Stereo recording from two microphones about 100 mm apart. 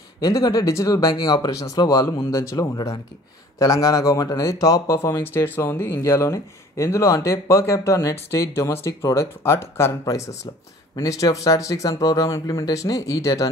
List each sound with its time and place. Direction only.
0.2 s speech: 35° left (ahead or behind)